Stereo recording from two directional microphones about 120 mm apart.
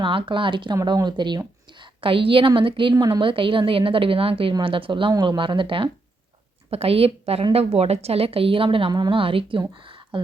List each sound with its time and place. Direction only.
0.0 s a woman's voice: 45° right (ahead or behind)
2.9 s a woman's voice: 30° right (ahead or behind)
3.2 s a woman's voice: 45° right (ahead or behind)
5.1 s speech: 30° right (ahead or behind)
5.4 s a woman's voice: 45° right (ahead or behind)